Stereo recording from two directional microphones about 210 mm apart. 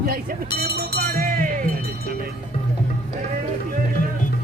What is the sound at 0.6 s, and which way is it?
Music, 50° right (ahead or behind).